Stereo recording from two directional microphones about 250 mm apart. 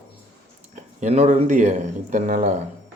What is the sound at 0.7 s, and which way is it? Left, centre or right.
Speech, right.